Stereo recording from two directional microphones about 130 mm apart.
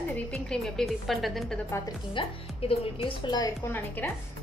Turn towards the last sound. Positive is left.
turn(degrees=15)  # may be behind; listen again after turning